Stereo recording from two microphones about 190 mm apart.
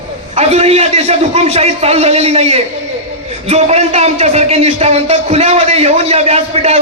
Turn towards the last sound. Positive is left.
turn(degrees=-35)  # may be behind; listen again after turning